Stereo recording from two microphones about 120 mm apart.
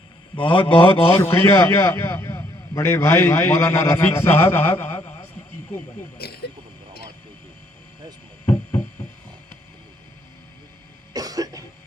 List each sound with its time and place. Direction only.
0.3 s a man's voice: 45° left (ahead or behind)
1.2 s a man's voice: 20° left (ahead or behind)
11.1 s cough: 30° right (ahead or behind)